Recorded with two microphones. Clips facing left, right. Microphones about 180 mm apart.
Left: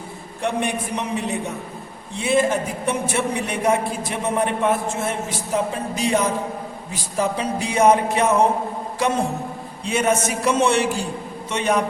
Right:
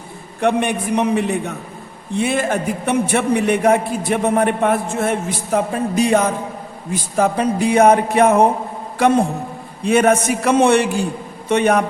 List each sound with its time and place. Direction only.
0.4 s a man's voice: 60° right (ahead or behind)
9.8 s a man's voice: 55° right (ahead or behind)